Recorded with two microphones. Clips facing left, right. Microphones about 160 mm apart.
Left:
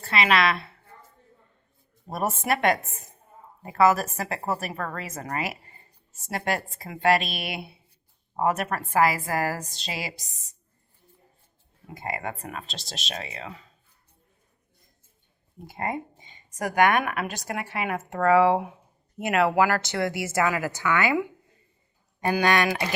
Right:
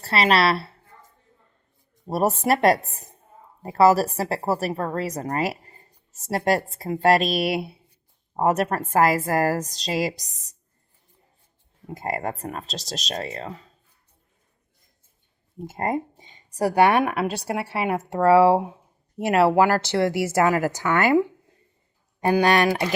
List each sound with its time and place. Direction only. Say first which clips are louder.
0.0 s a woman's voice: right 3 dB; 35° right (ahead or behind)
2.0 s a woman's voice: right 5 dB; 35° right (ahead or behind)
11.9 s a woman's voice: right 4 dB; 40° right (ahead or behind)
15.6 s a woman's voice: right 5 dB; 40° right (ahead or behind)
22.2 s a woman's voice: right 4 dB; 30° right (ahead or behind)